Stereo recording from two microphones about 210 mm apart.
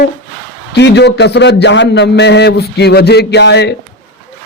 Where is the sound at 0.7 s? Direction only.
55° left (ahead or behind).